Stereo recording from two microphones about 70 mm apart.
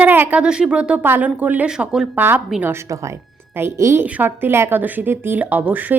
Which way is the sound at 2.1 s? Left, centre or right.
Right.